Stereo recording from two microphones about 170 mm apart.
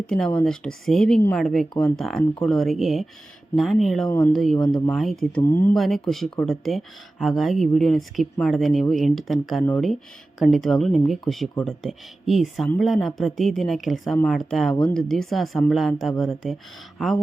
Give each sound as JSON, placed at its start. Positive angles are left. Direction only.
{"t": 0.1, "sound": "speech", "side_deg": 5}
{"t": 4.5, "sound": "speech", "side_deg": 25}
{"t": 4.9, "sound": "speech", "side_deg": 0}